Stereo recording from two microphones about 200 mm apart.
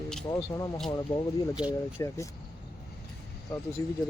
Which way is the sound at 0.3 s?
15° left (ahead or behind).